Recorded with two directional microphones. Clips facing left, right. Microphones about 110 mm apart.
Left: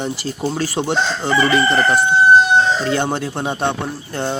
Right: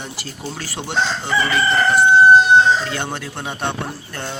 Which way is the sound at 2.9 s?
30° left (ahead or behind).